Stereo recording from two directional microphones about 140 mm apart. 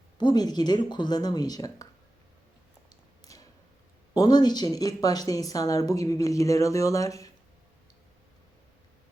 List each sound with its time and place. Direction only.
0.2 s a woman's voice: 30° left (ahead or behind)
4.1 s a woman's voice: 30° left (ahead or behind)